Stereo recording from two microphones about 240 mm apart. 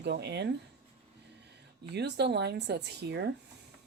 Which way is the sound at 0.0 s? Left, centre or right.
Right.